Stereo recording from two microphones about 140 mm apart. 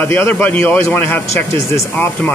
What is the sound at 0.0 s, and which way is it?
Speech, 15° left (ahead or behind).